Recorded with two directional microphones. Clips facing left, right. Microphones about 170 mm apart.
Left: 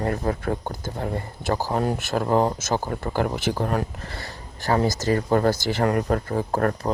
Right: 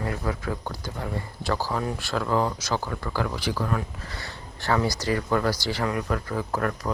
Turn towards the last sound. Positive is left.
turn(degrees=40)  # may be behind; listen again after turning